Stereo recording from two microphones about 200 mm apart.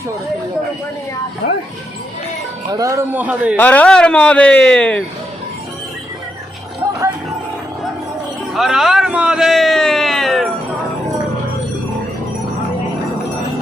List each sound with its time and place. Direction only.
1.4 s speech: 55° left (ahead or behind)
2.7 s a man's voice: 15° right (ahead or behind)
3.6 s speech: 5° left (ahead or behind)
8.5 s a man's voice: centre (ahead or behind)